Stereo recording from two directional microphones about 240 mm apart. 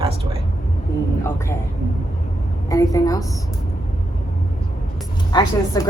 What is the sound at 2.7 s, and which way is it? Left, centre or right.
Speech, centre.